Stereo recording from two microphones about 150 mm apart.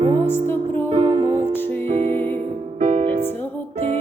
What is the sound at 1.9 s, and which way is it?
Music, 45° right (ahead or behind).